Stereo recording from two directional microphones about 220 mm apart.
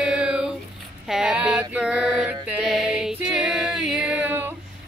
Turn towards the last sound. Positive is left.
turn(degrees=-10)  # may be behind; listen again after turning